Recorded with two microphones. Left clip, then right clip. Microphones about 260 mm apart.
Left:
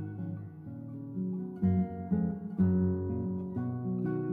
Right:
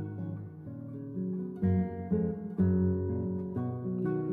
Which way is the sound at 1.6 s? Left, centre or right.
Right.